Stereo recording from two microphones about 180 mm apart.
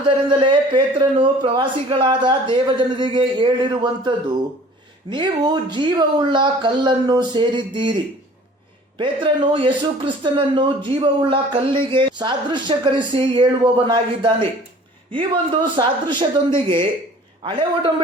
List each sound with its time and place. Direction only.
0.0 s speech: 25° right (ahead or behind)
9.0 s speech: 25° right (ahead or behind)
15.7 s speech: 25° right (ahead or behind)